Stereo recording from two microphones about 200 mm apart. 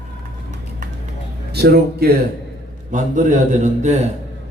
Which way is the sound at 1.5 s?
50° right (ahead or behind).